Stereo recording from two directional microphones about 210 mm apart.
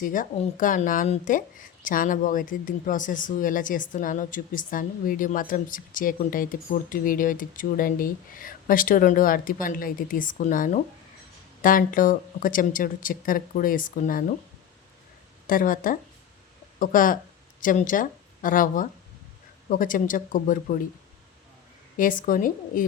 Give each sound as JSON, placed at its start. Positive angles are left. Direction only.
{"t": 0.0, "sound": "a woman's voice", "side_deg": 40}
{"t": 15.4, "sound": "a woman's voice", "side_deg": 40}
{"t": 21.9, "sound": "a woman's voice", "side_deg": 40}